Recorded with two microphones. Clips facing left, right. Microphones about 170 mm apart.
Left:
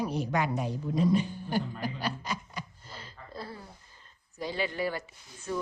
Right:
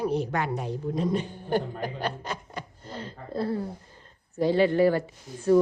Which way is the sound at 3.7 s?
45° right (ahead or behind).